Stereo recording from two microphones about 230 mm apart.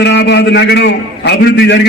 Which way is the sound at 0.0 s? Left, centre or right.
Left.